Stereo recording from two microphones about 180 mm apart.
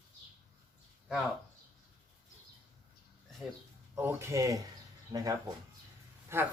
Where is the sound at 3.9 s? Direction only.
15° right (ahead or behind).